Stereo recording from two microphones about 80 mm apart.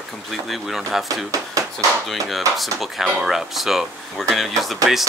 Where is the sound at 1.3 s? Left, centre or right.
Right.